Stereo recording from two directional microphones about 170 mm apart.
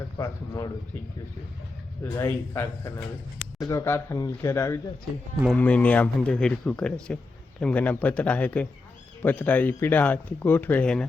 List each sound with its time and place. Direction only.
0.2 s speech: 15° left (ahead or behind)
2.1 s speech: 15° left (ahead or behind)